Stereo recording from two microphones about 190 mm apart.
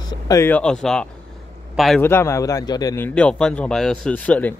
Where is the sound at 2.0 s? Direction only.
15° left (ahead or behind).